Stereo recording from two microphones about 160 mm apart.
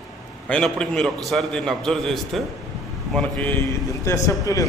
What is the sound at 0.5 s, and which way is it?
A man's voice, 5° left (ahead or behind).